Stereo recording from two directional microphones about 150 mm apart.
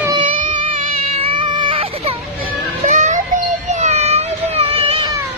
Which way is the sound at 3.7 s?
50° right (ahead or behind).